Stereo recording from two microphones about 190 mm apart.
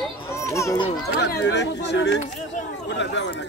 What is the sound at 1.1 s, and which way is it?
Speech, 60° left (ahead or behind).